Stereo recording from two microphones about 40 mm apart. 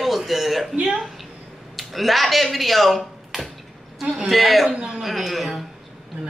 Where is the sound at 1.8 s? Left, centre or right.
Centre.